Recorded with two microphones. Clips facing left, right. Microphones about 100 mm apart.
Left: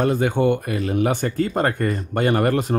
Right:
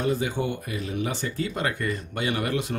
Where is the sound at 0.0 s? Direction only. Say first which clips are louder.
Left 7 dB; 55° left (ahead or behind).